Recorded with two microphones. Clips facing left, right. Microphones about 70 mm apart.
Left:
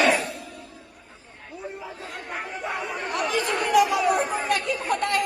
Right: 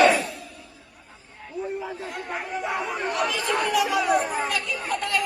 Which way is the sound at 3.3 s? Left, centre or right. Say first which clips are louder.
Left 1 dB; left.